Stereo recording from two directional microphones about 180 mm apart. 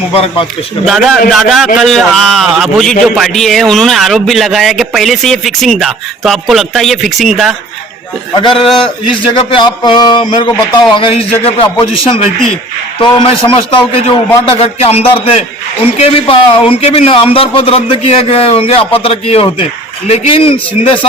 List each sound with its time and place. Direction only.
0.1 s a man's voice: 30° left (ahead or behind)
0.9 s a man's voice: centre (ahead or behind)
8.4 s a man's voice: 25° left (ahead or behind)
8.6 s a man's voice: centre (ahead or behind)
9.3 s a man's voice: 30° left (ahead or behind)